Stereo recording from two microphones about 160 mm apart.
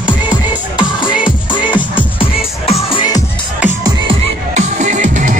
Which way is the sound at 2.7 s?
35° left (ahead or behind).